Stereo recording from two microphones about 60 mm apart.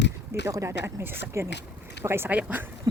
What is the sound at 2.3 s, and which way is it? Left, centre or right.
Speech, right.